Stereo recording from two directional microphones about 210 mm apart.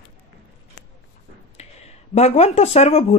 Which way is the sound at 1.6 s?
30° left (ahead or behind).